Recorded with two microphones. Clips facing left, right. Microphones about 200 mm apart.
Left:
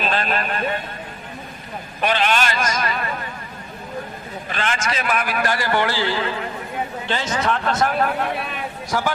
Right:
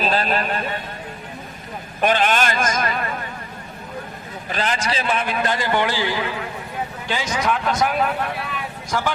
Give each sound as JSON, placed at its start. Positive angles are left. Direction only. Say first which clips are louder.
{"t": 0.0, "sound": "a man's voice", "louder": "right 2 dB", "side_deg": -40}
{"t": 2.0, "sound": "a man's voice", "louder": "right 2 dB", "side_deg": -45}
{"t": 4.5, "sound": "a man's voice", "louder": "right 1 dB", "side_deg": -35}
{"t": 8.9, "sound": "speech", "louder": "left 1 dB", "side_deg": 10}